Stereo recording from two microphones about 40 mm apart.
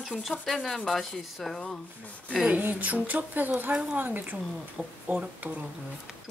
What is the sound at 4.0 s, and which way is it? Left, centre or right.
Speech, right.